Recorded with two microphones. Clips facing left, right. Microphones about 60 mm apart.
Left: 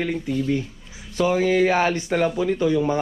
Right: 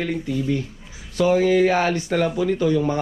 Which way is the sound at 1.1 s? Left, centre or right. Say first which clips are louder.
Right 2 dB; left.